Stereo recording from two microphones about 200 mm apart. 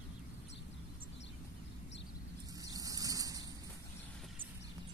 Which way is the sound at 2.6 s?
15° right (ahead or behind).